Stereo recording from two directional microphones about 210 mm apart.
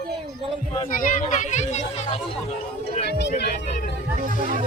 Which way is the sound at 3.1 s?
55° left (ahead or behind).